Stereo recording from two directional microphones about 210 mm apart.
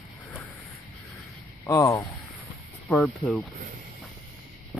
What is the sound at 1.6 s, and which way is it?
Speech, 15° left (ahead or behind).